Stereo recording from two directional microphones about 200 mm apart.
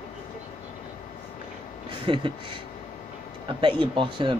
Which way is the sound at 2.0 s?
25° right (ahead or behind).